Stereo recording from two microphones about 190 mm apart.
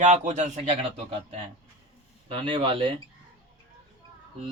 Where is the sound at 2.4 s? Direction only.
25° right (ahead or behind).